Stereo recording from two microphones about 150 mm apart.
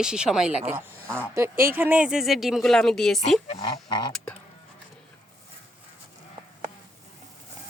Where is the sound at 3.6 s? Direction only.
30° left (ahead or behind).